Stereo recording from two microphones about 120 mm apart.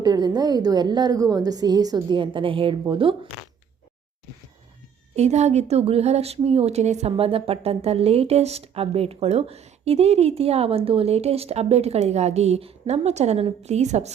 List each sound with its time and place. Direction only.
0.0 s a woman's voice: 35° right (ahead or behind)
5.1 s speech: 65° right (ahead or behind)
7.2 s speech: 50° right (ahead or behind); by 14.1 s 65° right (ahead or behind)